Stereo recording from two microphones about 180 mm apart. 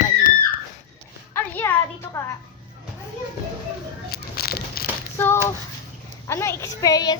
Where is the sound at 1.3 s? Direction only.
10° left (ahead or behind).